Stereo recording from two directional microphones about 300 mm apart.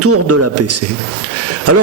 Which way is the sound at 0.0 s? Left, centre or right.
Right.